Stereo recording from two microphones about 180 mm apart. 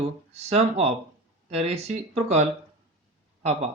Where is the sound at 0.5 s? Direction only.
35° right (ahead or behind).